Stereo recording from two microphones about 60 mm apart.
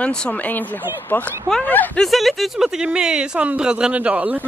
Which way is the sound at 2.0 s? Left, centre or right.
Centre.